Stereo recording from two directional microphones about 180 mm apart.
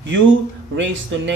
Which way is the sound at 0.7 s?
85° right.